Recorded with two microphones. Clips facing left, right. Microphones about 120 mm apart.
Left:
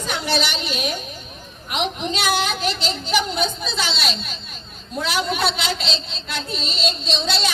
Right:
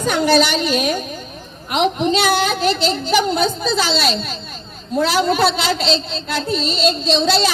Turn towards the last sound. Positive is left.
turn(degrees=-40)  # may be behind; listen again after turning